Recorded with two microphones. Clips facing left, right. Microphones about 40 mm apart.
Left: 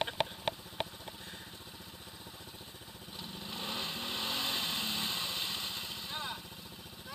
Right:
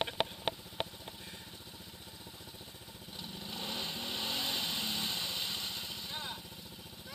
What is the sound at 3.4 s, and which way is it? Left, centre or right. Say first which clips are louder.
Vehicle: left 1 dB; centre.